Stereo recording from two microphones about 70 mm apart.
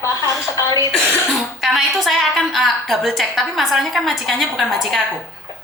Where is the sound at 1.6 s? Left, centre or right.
Centre.